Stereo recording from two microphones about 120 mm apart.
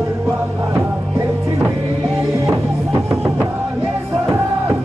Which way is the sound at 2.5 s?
25° right (ahead or behind).